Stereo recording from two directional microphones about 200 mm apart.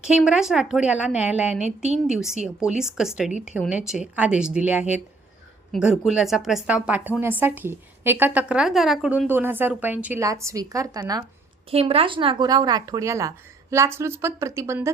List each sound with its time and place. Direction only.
0.0 s a woman's voice: 5° right (ahead or behind)
11.7 s a woman's voice: 30° right (ahead or behind)